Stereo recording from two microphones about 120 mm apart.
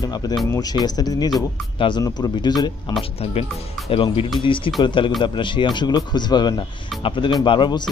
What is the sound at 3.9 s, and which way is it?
Speech, 50° left (ahead or behind).